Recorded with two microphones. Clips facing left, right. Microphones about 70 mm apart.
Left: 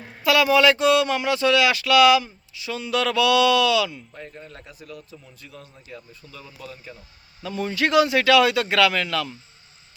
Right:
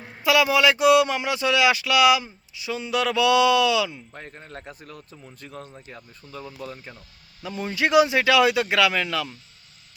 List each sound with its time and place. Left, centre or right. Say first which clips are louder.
0.2 s speech: left 2 dB; centre
4.1 s a man's voice: even; right
7.4 s speech: left 1 dB; centre